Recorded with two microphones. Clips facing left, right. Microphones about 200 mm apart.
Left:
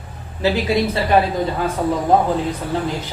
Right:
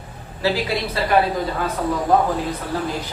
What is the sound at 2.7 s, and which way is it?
Speech, 25° left (ahead or behind).